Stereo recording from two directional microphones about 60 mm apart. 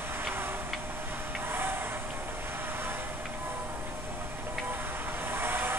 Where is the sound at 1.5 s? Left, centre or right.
Right.